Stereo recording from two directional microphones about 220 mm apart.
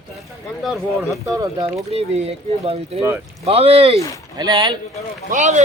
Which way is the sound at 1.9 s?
30° right (ahead or behind).